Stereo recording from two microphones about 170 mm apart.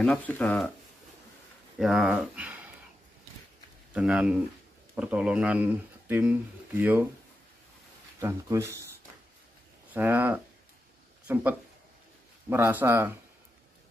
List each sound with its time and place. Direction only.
0.0 s speech: 5° left (ahead or behind)
1.8 s speech: 5° right (ahead or behind)
3.9 s speech: 5° right (ahead or behind)
8.2 s speech: 15° right (ahead or behind)
9.9 s speech: 10° right (ahead or behind)
12.4 s speech: 15° right (ahead or behind)